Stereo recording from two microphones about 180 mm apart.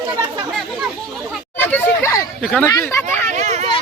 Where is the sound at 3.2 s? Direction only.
40° right (ahead or behind).